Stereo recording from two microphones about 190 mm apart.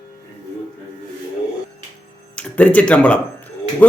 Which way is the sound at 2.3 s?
5° left (ahead or behind).